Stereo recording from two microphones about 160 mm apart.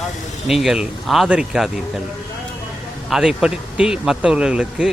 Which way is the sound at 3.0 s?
5° right (ahead or behind).